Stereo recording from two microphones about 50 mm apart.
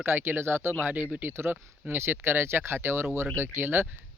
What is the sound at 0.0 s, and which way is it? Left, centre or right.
Speech, right.